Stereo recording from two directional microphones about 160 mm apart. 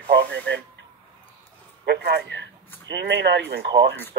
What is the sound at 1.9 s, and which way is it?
Speech, 90° right.